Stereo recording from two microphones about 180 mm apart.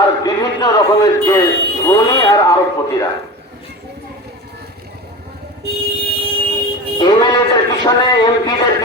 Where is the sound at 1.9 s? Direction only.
20° left (ahead or behind).